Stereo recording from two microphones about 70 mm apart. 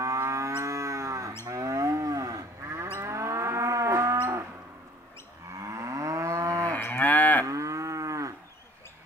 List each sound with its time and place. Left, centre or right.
0.0 s moo: right
3.0 s moo: right
5.6 s moo: right
6.8 s cattle: left
7.4 s moo: right